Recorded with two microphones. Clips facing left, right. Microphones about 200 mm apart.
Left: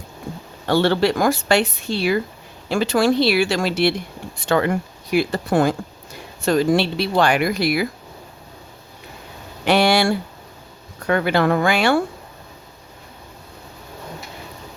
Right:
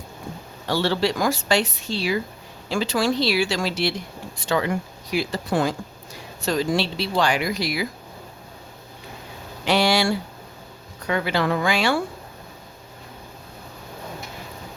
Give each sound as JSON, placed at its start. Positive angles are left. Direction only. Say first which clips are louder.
{"t": 0.7, "sound": "speech", "louder": "left 5 dB", "side_deg": 55}
{"t": 9.6, "sound": "speech", "louder": "left 4 dB", "side_deg": 55}